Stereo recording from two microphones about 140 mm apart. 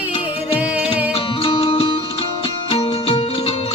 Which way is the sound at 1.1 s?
40° left (ahead or behind).